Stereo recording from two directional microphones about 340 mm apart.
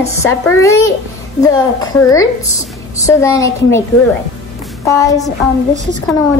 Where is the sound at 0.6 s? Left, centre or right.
Centre.